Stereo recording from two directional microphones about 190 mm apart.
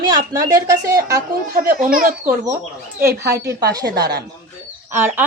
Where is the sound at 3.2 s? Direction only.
60° right (ahead or behind).